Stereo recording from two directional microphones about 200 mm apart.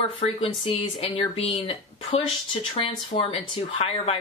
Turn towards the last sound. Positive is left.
turn(degrees=30)  # may be behind; listen again after turning